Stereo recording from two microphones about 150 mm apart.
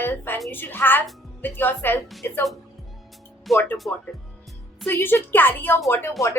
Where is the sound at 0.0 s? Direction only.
15° left (ahead or behind).